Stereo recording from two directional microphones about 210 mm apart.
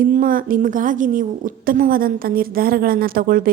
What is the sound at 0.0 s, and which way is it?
A woman's voice, 40° right (ahead or behind).